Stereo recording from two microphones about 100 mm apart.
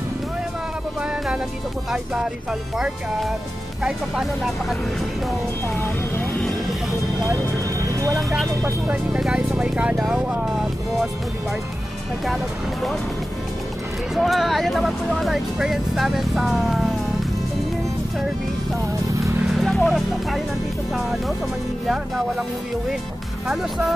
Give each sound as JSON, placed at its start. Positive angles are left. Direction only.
{"t": 2.8, "sound": "speech", "side_deg": 0}
{"t": 5.8, "sound": "speech", "side_deg": 20}
{"t": 8.8, "sound": "speech", "side_deg": -10}
{"t": 14.1, "sound": "speech", "side_deg": 0}
{"t": 19.4, "sound": "vehicle", "side_deg": 0}
{"t": 19.9, "sound": "speech", "side_deg": 0}